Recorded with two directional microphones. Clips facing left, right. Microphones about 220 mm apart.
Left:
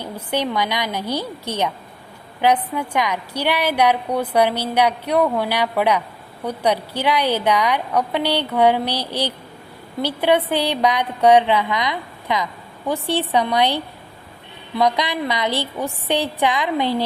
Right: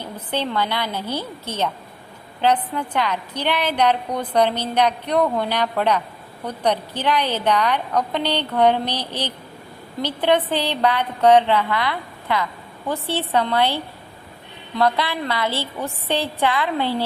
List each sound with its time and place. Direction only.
0.3 s a woman's voice: 10° left (ahead or behind)